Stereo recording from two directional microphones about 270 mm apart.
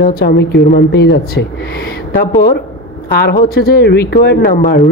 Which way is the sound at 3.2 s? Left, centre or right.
Left.